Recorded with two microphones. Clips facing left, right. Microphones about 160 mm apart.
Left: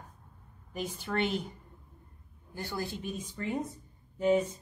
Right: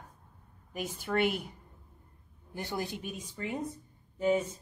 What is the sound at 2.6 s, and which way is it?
Speech, 20° right (ahead or behind).